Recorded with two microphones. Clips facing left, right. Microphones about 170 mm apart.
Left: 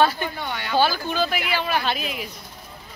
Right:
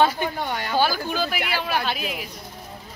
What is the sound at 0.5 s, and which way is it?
Speech, 40° right (ahead or behind).